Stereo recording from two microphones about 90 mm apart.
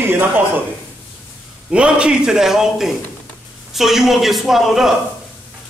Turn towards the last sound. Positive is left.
turn(degrees=0)  # may be behind; listen again after turning